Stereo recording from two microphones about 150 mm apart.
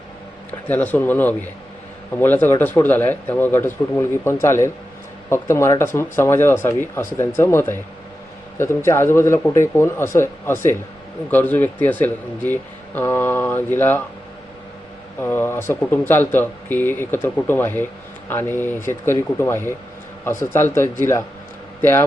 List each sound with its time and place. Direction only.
0.7 s speech: 10° left (ahead or behind)
15.2 s a man's voice: 15° left (ahead or behind)